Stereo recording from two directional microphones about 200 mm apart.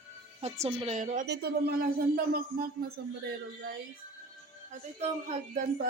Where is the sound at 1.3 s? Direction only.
50° right (ahead or behind).